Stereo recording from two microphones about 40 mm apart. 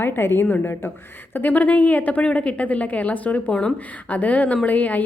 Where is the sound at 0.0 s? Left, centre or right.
Left.